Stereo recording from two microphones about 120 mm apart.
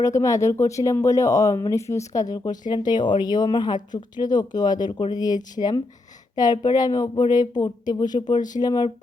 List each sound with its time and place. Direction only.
0.0 s speech: 25° left (ahead or behind)